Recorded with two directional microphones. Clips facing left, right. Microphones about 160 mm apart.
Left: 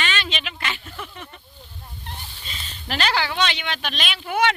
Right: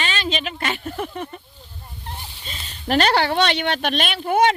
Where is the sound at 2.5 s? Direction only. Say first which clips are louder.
Right 8 dB; 45° right (ahead or behind).